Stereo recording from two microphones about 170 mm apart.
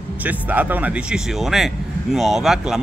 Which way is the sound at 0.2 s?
10° right (ahead or behind).